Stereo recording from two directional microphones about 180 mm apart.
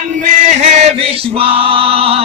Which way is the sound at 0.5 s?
35° right (ahead or behind).